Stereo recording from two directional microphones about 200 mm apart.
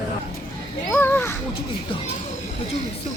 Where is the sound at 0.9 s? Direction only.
10° left (ahead or behind).